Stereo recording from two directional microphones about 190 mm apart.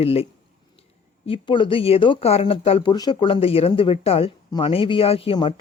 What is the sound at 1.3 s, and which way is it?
Speech, 25° left (ahead or behind).